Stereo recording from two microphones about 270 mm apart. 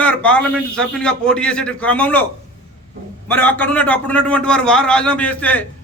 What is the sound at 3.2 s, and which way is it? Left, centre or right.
A man's voice, centre.